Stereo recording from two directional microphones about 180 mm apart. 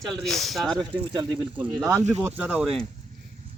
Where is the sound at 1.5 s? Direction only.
10° right (ahead or behind).